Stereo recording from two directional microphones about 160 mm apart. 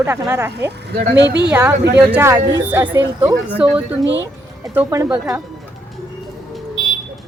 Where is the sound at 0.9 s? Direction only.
70° right (ahead or behind).